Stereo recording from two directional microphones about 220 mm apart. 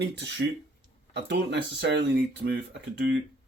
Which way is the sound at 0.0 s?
50° right (ahead or behind).